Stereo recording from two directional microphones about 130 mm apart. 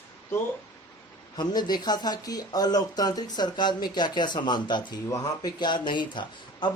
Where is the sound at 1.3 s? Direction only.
35° left (ahead or behind).